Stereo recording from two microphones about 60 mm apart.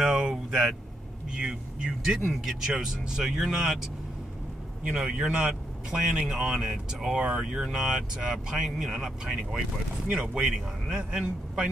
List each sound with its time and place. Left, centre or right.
0.0 s a sound: centre
1.3 s speech: centre
2.0 s speech: centre